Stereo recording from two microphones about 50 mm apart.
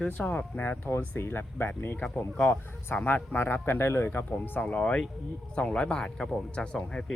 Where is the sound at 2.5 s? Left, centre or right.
Left.